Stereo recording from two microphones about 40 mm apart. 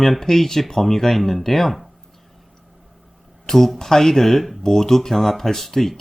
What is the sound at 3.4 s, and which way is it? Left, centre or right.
Speech, centre.